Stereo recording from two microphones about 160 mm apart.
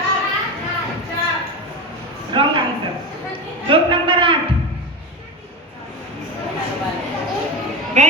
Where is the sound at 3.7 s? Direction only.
30° right (ahead or behind).